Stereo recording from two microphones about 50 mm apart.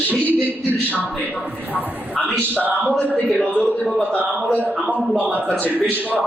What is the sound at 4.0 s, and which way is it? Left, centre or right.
Speech, left.